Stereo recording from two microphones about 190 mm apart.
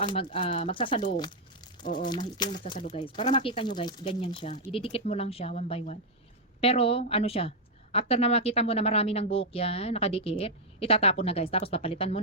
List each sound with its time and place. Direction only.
0.0 s speech: 25° left (ahead or behind)
2.0 s speech: 25° left (ahead or behind)